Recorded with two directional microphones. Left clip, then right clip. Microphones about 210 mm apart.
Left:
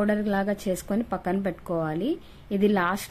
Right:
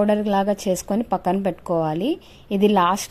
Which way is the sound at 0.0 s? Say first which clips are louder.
Right 6 dB; 25° right (ahead or behind).